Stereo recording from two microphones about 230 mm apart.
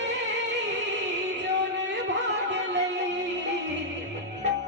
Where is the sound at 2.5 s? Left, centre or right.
Right.